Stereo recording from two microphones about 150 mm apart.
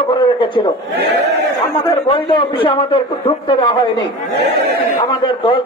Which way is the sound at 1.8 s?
35° left (ahead or behind).